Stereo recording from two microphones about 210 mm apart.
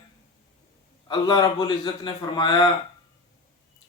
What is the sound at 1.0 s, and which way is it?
Speech, 20° left (ahead or behind).